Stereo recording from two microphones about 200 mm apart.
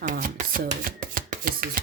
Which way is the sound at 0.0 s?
40° right (ahead or behind).